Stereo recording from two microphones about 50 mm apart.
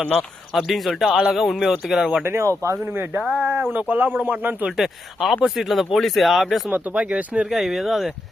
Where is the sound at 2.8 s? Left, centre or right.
Right.